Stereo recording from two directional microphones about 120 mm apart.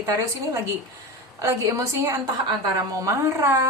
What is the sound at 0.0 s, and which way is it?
A woman's voice, 30° right (ahead or behind).